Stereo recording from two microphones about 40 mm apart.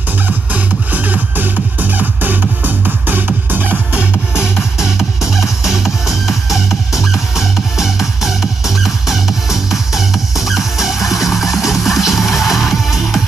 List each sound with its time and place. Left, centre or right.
0.5 s music: right
4.4 s music: centre